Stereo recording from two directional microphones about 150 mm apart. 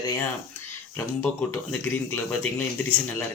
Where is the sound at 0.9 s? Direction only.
10° left (ahead or behind).